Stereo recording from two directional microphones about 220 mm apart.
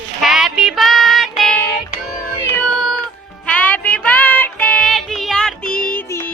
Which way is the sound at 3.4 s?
5° left (ahead or behind).